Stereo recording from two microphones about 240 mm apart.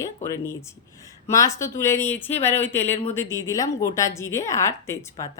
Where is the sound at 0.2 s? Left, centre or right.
Centre.